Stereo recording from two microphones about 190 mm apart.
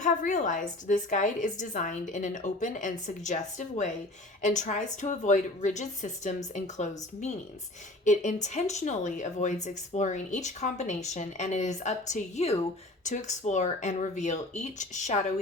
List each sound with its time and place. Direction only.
0.0 s a woman's voice: 40° left (ahead or behind)